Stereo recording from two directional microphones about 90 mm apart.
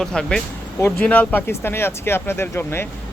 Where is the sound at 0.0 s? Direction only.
5° left (ahead or behind); by 2.8 s 25° left (ahead or behind).